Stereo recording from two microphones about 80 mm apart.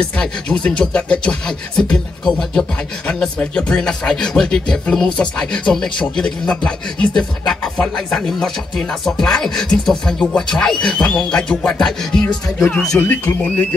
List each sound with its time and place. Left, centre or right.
0.0 s speech: centre
13.0 s speech: left